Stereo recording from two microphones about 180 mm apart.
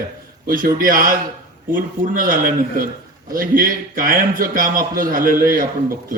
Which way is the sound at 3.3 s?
50° right (ahead or behind).